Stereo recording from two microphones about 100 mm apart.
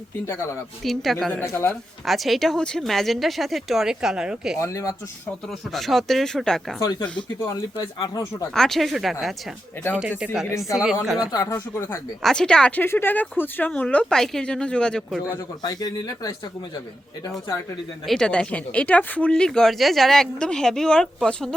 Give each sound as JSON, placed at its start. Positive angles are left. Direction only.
{"t": 0.3, "sound": "a woman's voice", "side_deg": 25}
{"t": 0.9, "sound": "speech", "side_deg": 0}
{"t": 1.3, "sound": "a woman's voice", "side_deg": 20}
{"t": 2.0, "sound": "speech", "side_deg": 0}
{"t": 4.6, "sound": "speech", "side_deg": 30}
{"t": 5.5, "sound": "speech", "side_deg": 0}
{"t": 7.3, "sound": "speech", "side_deg": 35}
{"t": 8.5, "sound": "speech", "side_deg": 5}
{"t": 11.3, "sound": "speech", "side_deg": 35}
{"t": 11.5, "sound": "a woman's voice", "side_deg": 25}
{"t": 12.2, "sound": "speech", "side_deg": 5}
{"t": 12.8, "sound": "speech", "side_deg": 20}
{"t": 15.4, "sound": "speech", "side_deg": 40}
{"t": 18.0, "sound": "speech", "side_deg": 5}